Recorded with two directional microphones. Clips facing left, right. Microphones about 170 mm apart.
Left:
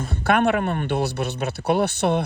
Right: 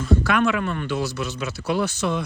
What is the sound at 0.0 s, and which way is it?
A man's voice, 55° left (ahead or behind).